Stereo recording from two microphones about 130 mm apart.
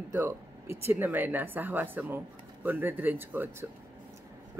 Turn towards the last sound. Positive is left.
turn(degrees=-15)  # may be behind; listen again after turning